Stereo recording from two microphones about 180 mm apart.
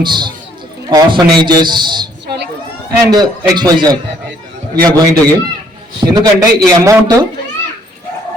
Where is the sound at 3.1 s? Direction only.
20° right (ahead or behind).